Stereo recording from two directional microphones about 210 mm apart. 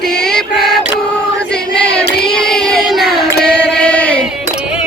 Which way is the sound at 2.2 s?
Centre (ahead or behind).